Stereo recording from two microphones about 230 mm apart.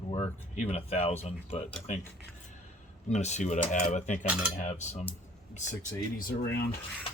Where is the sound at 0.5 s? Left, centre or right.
Left.